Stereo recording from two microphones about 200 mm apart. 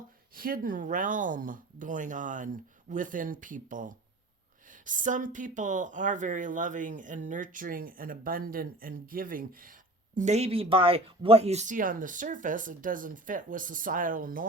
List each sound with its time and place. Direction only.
0.3 s speech: 45° right (ahead or behind)